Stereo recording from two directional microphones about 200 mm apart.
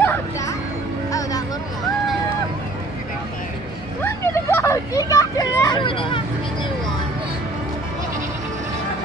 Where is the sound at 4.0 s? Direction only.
10° left (ahead or behind).